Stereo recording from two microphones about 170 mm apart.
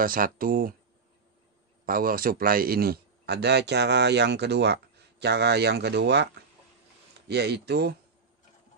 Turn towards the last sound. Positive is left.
turn(degrees=-70)  # may be behind; listen again after turning